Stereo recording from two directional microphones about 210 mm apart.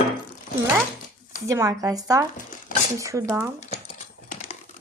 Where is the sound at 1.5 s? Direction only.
15° right (ahead or behind).